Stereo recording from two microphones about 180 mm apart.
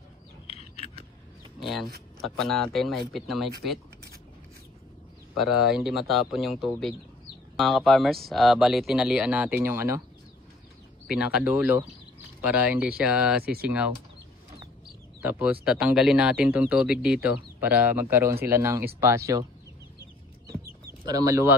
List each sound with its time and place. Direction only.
1.6 s speech: centre (ahead or behind)
5.3 s speech: centre (ahead or behind)
11.1 s speech: 5° right (ahead or behind)
13.4 s speech: 60° right (ahead or behind)
13.7 s speech: 5° right (ahead or behind)
15.2 s speech: 5° right (ahead or behind)
21.0 s speech: 20° right (ahead or behind)